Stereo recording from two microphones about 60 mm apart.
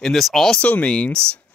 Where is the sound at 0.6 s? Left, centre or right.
Left.